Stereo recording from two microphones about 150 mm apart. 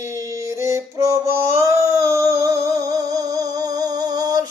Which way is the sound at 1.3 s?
20° right (ahead or behind).